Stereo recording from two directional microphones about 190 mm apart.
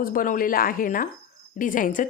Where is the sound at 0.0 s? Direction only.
45° left (ahead or behind).